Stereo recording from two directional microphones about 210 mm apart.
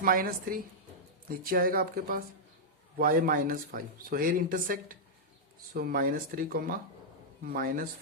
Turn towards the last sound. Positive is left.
turn(degrees=-45)  # may be behind; listen again after turning